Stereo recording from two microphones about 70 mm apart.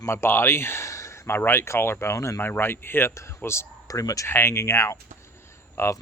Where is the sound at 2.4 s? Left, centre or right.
Left.